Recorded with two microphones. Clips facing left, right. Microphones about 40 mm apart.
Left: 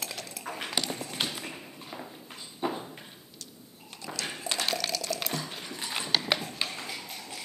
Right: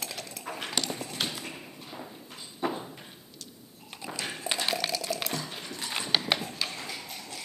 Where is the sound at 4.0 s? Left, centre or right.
Centre.